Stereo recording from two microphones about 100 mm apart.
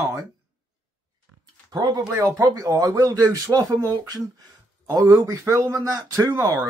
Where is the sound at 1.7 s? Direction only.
40° right (ahead or behind).